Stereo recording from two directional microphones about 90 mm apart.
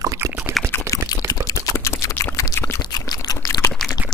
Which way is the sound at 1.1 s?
45° left (ahead or behind).